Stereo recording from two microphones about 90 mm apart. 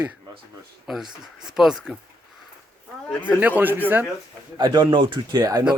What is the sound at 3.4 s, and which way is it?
Speech, 20° right (ahead or behind).